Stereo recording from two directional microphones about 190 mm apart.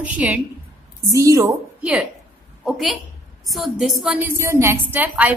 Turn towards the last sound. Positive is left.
turn(degrees=-10)  # may be behind; listen again after turning